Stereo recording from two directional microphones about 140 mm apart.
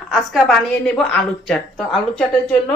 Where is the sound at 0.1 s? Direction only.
Centre (ahead or behind).